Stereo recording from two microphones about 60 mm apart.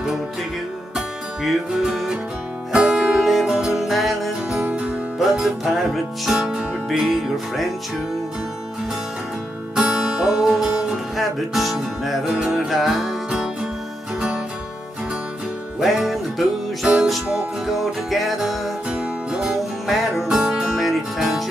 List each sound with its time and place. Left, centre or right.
0.9 s music: centre
4.6 s music: right
5.2 s music: centre
9.8 s music: centre
12.3 s music: centre
15.8 s music: centre